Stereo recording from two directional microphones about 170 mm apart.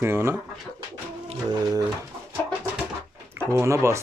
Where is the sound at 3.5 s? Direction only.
15° right (ahead or behind).